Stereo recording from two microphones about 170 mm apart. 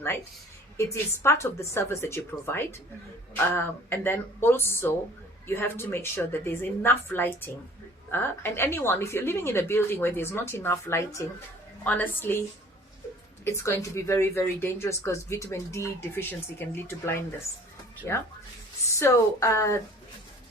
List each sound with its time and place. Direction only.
1.2 s a woman's voice: 15° left (ahead or behind)